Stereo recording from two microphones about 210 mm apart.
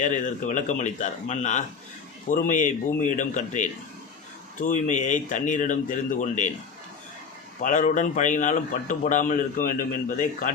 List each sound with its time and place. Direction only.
0.0 s a man's voice: 35° left (ahead or behind)
7.6 s a man's voice: 35° left (ahead or behind)